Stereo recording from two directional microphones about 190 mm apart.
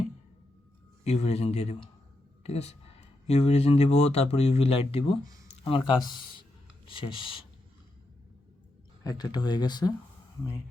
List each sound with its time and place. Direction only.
1.0 s speech: 35° left (ahead or behind)
9.0 s speech: 20° left (ahead or behind)